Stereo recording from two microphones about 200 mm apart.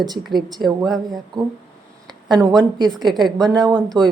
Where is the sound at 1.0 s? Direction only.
20° right (ahead or behind).